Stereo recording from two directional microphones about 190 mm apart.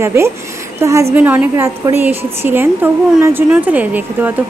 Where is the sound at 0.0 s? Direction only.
15° right (ahead or behind).